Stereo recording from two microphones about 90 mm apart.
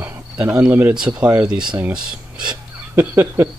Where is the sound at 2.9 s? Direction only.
30° right (ahead or behind).